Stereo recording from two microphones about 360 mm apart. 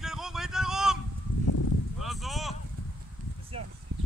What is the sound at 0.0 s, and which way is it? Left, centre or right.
Vehicle, centre.